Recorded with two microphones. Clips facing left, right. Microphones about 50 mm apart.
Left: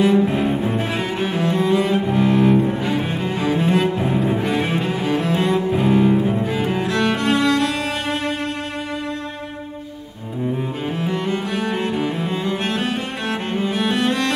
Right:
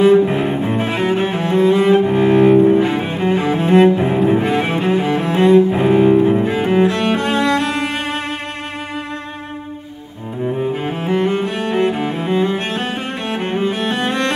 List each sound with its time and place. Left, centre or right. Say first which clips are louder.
0.0 s double bass: right 5 dB; right
1.5 s cello: right 6 dB; centre
1.8 s cello: right 6 dB; right
10.4 s cello: right 4 dB; right
14.0 s music: right 1 dB; right